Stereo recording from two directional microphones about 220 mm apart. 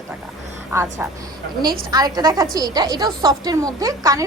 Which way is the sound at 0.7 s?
10° right (ahead or behind).